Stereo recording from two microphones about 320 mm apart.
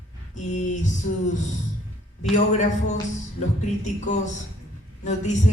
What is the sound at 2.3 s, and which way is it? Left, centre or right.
Speech, left.